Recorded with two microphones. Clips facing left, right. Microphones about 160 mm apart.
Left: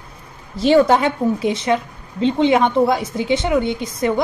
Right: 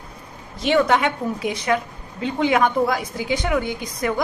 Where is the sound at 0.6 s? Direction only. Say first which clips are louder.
Left 5 dB; 30° left (ahead or behind).